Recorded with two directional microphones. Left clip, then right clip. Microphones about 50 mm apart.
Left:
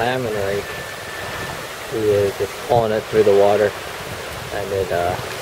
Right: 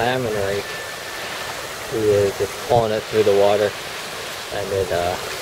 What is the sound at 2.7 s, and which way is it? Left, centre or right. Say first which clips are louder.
Speech: left 1 dB; left.